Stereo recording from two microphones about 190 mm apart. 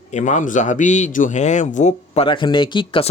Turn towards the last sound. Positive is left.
turn(degrees=25)  # may be behind; listen again after turning